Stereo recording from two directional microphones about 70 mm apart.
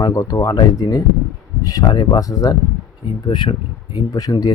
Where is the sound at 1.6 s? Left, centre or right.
Left.